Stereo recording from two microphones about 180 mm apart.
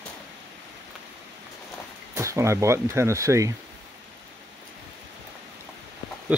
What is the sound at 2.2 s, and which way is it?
Speech, 15° right (ahead or behind).